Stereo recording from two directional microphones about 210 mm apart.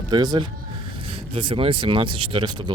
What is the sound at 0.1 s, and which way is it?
Speech, 20° right (ahead or behind).